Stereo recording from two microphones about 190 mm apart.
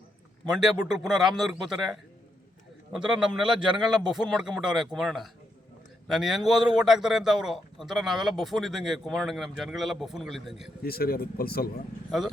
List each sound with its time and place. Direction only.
0.5 s a man's voice: centre (ahead or behind)
3.0 s a man's voice: 5° right (ahead or behind)
10.8 s speech: 55° left (ahead or behind)